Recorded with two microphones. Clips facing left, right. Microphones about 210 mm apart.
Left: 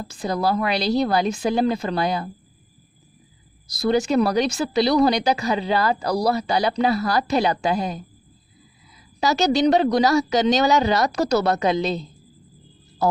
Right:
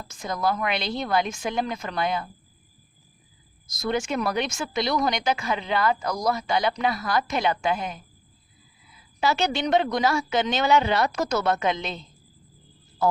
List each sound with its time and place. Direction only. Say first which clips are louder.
0.0 s speech: left 4 dB; 35° left (ahead or behind)
3.7 s speech: left 7 dB; 35° left (ahead or behind)
9.2 s speech: left 6 dB; 40° left (ahead or behind)